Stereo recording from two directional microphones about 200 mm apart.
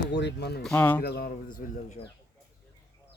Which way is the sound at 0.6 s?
5° left (ahead or behind).